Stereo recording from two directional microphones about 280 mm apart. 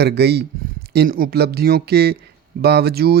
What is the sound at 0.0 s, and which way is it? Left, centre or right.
Speech, right.